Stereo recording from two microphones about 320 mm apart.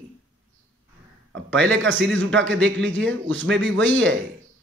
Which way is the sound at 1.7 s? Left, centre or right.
Right.